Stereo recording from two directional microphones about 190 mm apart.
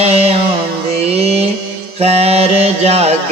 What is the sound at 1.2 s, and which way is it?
Mantra, 35° right (ahead or behind).